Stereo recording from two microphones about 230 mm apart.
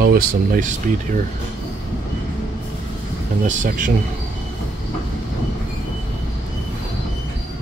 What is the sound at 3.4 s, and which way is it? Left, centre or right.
Speech, right.